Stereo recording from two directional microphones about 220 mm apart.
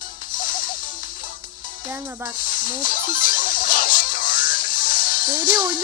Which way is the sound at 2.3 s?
40° left (ahead or behind).